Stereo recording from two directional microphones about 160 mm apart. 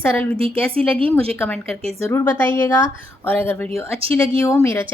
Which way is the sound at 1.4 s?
10° left (ahead or behind).